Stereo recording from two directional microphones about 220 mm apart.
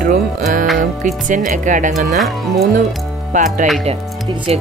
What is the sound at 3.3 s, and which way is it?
Speech, 35° right (ahead or behind).